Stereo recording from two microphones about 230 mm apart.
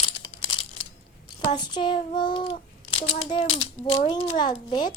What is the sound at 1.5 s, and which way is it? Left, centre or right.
A child's voice, centre.